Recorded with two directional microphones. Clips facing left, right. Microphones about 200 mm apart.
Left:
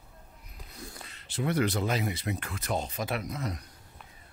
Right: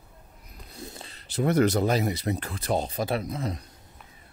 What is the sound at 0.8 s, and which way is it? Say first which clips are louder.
Speech: right 4 dB; 25° right (ahead or behind).